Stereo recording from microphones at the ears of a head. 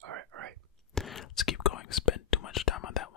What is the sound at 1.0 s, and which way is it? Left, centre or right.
Whispering, left.